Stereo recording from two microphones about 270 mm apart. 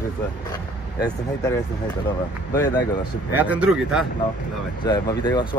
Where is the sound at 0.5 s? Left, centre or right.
Centre.